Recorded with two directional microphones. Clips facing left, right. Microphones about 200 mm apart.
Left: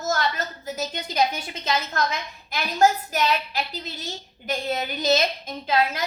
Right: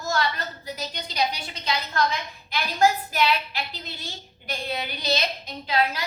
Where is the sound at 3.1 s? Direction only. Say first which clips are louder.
Even; 40° left (ahead or behind).